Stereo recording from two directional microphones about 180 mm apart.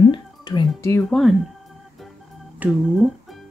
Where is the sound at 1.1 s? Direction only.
Centre (ahead or behind).